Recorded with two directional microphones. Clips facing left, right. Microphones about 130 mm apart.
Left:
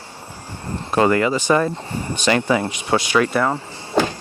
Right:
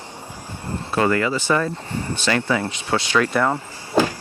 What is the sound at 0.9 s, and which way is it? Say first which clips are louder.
Speech: left 3 dB; 25° left (ahead or behind).